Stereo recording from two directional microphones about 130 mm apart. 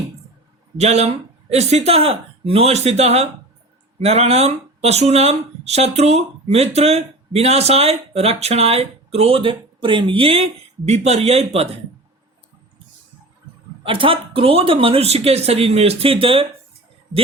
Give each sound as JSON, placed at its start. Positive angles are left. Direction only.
{"t": 0.8, "sound": "a woman's voice", "side_deg": -55}
{"t": 13.8, "sound": "speech", "side_deg": -40}